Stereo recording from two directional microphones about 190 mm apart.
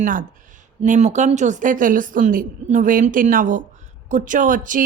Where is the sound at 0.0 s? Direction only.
45° right (ahead or behind).